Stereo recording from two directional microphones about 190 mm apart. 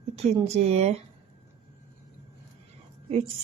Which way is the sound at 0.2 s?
35° right (ahead or behind).